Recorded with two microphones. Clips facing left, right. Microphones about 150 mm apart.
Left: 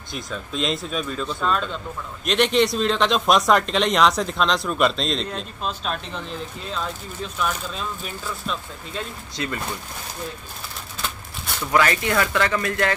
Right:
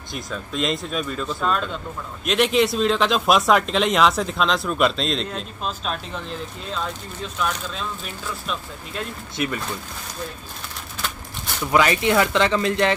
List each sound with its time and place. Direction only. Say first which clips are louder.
0.1 s speech: right 1 dB; centre (ahead or behind)
9.4 s speech: right 3 dB; 15° right (ahead or behind)
11.6 s speech: right 2 dB; 15° right (ahead or behind)